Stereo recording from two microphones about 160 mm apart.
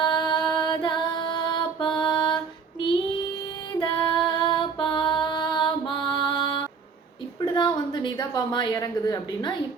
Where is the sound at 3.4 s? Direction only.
25° left (ahead or behind).